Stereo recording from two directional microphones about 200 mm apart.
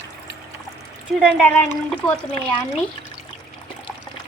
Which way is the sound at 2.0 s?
5° left (ahead or behind).